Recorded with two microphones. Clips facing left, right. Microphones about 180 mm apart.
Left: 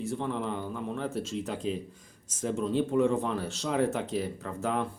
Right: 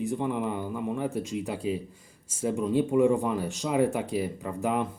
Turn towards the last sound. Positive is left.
turn(degrees=-15)  # may be behind; listen again after turning